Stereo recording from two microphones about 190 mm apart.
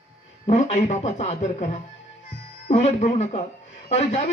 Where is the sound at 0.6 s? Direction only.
35° left (ahead or behind).